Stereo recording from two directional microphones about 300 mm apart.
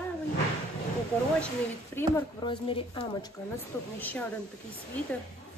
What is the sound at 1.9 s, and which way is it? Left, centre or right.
A woman's voice, centre.